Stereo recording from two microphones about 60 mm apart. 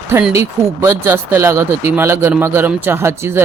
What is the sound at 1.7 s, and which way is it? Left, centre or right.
Speech, right.